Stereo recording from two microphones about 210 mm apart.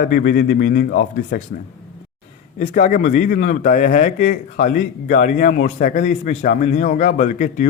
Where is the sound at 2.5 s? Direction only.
35° left (ahead or behind).